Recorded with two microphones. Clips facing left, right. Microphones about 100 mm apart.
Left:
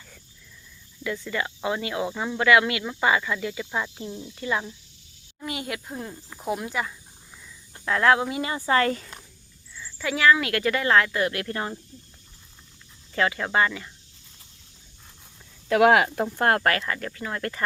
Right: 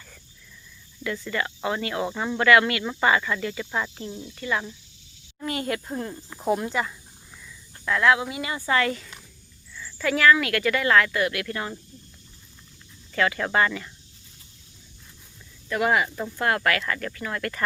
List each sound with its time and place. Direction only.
1.0 s speech: 15° left (ahead or behind)
4.3 s speech: 20° left (ahead or behind)
5.5 s speech: 10° left (ahead or behind)
7.9 s speech: 35° left (ahead or behind)
9.7 s speech: 15° left (ahead or behind); by 11.7 s 30° left (ahead or behind)
13.1 s speech: 25° left (ahead or behind)
15.7 s speech: 80° left
16.3 s speech: 50° left (ahead or behind)
16.8 s speech: 20° left (ahead or behind)